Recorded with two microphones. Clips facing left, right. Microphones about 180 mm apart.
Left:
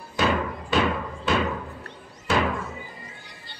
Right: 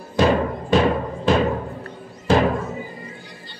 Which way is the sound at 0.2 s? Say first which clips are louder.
Right 6 dB; 35° right (ahead or behind).